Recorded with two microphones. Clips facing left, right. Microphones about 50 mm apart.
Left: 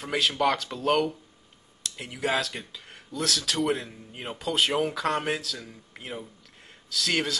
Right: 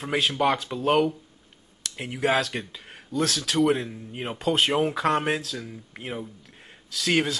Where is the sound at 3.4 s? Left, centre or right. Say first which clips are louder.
Right 5 dB; centre.